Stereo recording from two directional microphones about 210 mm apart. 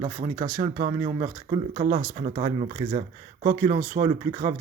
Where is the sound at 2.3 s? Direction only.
30° right (ahead or behind).